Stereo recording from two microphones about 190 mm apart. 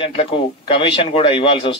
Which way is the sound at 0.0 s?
30° left (ahead or behind).